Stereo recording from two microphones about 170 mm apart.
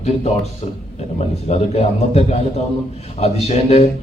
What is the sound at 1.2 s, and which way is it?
A man's voice, 40° left (ahead or behind).